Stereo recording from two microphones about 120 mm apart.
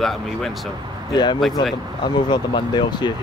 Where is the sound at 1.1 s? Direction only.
35° left (ahead or behind).